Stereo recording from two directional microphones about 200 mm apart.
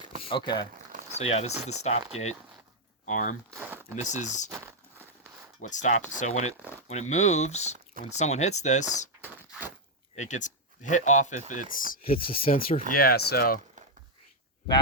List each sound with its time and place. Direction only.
0.2 s speech: 25° left (ahead or behind)
3.1 s speech: 40° left (ahead or behind)
3.5 s a sound: 10° right (ahead or behind)
4.1 s speech: 35° left (ahead or behind)
4.4 s speech: 15° right (ahead or behind)
5.5 s speech: 40° left (ahead or behind)
9.5 s a sound: 10° right (ahead or behind)
10.2 s speech: 35° left (ahead or behind)
12.2 s speech: 25° left (ahead or behind)
12.5 s speech: 45° left (ahead or behind)